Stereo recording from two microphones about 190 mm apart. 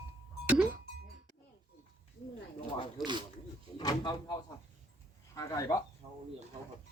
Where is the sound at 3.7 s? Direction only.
25° left (ahead or behind).